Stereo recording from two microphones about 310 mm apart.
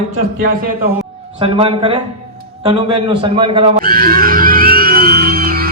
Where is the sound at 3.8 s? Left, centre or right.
Right.